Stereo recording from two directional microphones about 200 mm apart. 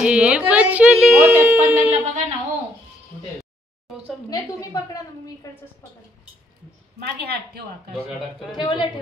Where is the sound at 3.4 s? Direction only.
Centre (ahead or behind).